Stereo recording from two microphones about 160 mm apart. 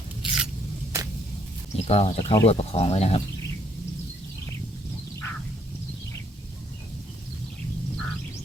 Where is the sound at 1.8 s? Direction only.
40° left (ahead or behind).